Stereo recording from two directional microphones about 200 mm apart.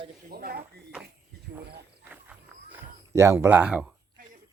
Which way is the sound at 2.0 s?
5° right (ahead or behind).